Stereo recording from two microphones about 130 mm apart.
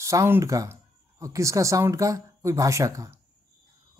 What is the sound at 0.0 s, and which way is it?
Speech, 20° right (ahead or behind).